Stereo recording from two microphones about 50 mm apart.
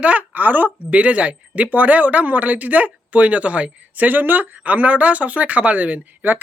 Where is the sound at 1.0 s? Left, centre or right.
Right.